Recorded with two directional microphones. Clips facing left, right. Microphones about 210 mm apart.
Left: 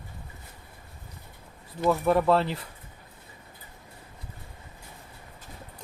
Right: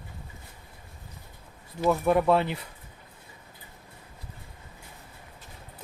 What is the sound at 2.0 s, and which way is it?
Speech, centre (ahead or behind).